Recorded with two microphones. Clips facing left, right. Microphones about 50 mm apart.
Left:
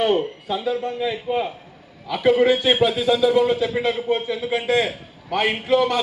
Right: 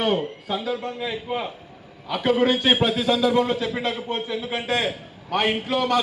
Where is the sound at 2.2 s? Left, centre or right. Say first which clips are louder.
Left 4 dB; left.